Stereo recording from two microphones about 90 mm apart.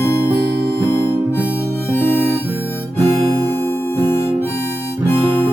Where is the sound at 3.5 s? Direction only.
25° left (ahead or behind).